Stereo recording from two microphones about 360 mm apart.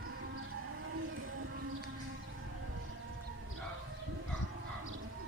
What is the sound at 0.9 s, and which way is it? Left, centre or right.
Vehicle, right.